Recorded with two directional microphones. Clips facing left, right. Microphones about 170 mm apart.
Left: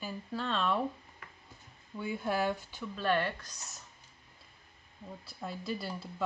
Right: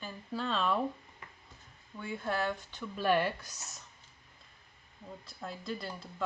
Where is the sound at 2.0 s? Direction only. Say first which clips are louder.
Left 2 dB; 10° left (ahead or behind).